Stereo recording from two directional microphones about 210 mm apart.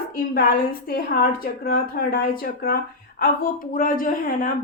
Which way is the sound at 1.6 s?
45° left (ahead or behind).